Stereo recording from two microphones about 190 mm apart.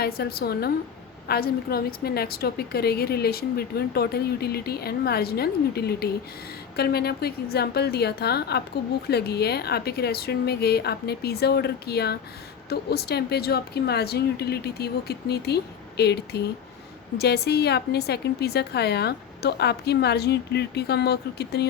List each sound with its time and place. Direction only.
0.0 s a woman's voice: 55° left (ahead or behind)